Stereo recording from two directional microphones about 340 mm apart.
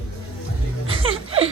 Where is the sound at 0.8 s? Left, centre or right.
Centre.